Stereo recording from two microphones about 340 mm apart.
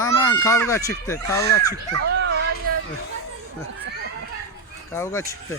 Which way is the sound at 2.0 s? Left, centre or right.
Right.